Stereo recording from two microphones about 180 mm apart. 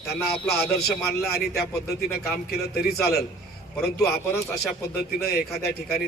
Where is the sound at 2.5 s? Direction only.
60° left (ahead or behind).